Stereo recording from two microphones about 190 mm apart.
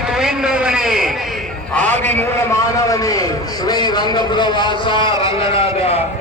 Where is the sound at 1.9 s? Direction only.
40° right (ahead or behind).